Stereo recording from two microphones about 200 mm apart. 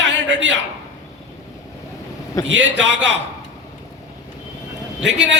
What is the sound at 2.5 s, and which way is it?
Speech, 65° right (ahead or behind).